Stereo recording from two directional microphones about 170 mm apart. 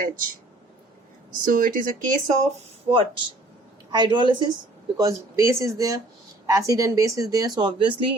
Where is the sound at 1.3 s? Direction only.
55° right (ahead or behind).